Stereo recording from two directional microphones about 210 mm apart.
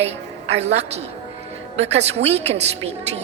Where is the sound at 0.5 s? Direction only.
30° right (ahead or behind).